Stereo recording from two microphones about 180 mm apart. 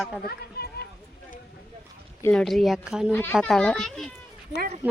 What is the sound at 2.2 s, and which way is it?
Speech, 5° left (ahead or behind).